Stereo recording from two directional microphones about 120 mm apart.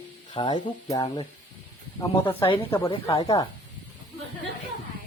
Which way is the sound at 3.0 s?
30° left (ahead or behind).